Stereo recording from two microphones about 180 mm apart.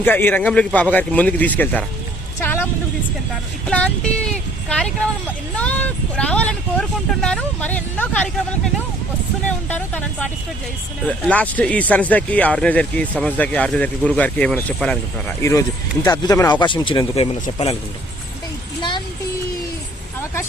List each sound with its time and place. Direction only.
0.0 s speech: 10° left (ahead or behind)
2.4 s music: 10° left (ahead or behind)
3.7 s a sound: 5° left (ahead or behind)
5.5 s speech: 10° left (ahead or behind)
9.6 s a man's voice: 10° left (ahead or behind); by 17.7 s 35° left (ahead or behind)
18.8 s a sound: 25° left (ahead or behind)